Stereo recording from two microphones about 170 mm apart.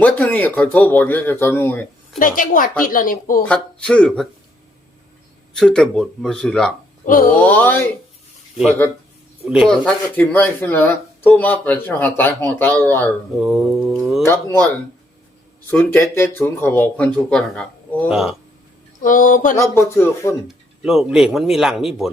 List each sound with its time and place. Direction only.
0.0 s speech: 10° left (ahead or behind)
2.1 s speech: 55° left (ahead or behind)
3.4 s speech: 5° left (ahead or behind)
5.5 s speech: 5° left (ahead or behind)
7.0 s speech: 50° left (ahead or behind)
7.3 s speech: 10° left (ahead or behind)
9.5 s speech: centre (ahead or behind)
13.3 s speech: centre (ahead or behind)
14.2 s speech: 15° left (ahead or behind)
15.7 s speech: 10° left (ahead or behind); by 18.3 s 5° right (ahead or behind)
19.0 s speech: 50° left (ahead or behind)
19.5 s speech: 15° left (ahead or behind)
20.8 s speech: 5° right (ahead or behind)